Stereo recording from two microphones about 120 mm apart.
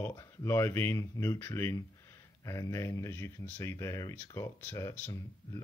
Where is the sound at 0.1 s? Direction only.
25° left (ahead or behind).